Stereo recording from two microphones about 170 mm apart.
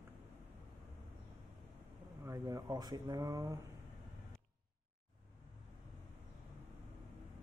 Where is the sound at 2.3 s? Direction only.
20° right (ahead or behind).